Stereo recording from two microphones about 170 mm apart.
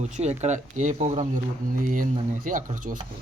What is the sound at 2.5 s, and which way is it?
Speech, 50° right (ahead or behind).